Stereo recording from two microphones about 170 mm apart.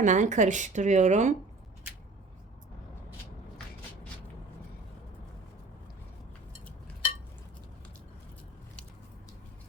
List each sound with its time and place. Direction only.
0.0 s speech: 45° right (ahead or behind)